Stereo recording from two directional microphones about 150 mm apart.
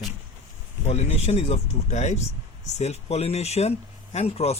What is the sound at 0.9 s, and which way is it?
Speech, 45° left (ahead or behind).